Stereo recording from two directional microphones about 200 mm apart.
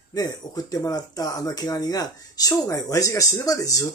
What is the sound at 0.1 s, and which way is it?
Speech, 20° left (ahead or behind).